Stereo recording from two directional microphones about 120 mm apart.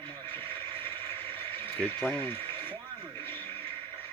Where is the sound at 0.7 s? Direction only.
15° left (ahead or behind).